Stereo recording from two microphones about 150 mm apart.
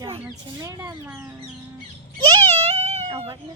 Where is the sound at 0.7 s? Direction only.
15° right (ahead or behind).